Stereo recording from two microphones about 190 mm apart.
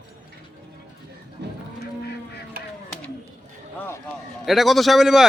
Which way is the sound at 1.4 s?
65° right (ahead or behind).